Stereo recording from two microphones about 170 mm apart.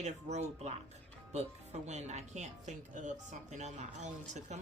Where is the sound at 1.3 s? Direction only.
40° right (ahead or behind).